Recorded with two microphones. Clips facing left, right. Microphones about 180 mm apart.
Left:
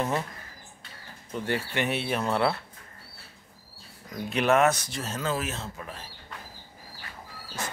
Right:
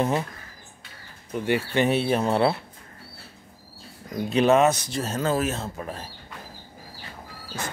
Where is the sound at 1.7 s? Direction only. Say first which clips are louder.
Right 7 dB; 35° right (ahead or behind).